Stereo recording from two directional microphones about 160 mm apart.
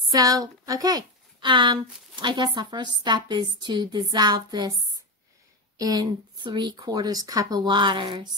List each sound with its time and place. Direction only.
0.0 s speech: 20° right (ahead or behind)